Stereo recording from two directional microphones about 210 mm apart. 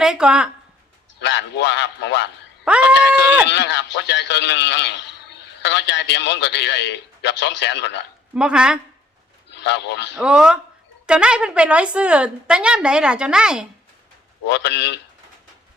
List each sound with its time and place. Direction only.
0.0 s a woman's voice: 5° right (ahead or behind)
1.2 s a man's voice: 55° left (ahead or behind)
2.6 s a woman's voice: 5° right (ahead or behind)
3.4 s a man's voice: 55° left (ahead or behind)
8.4 s a woman's voice: 5° right (ahead or behind)
9.6 s a man's voice: 55° left (ahead or behind)
10.2 s a woman's voice: 5° right (ahead or behind)
14.4 s a man's voice: 55° left (ahead or behind)